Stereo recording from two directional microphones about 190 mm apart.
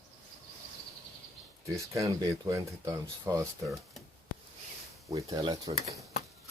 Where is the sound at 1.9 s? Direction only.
20° right (ahead or behind).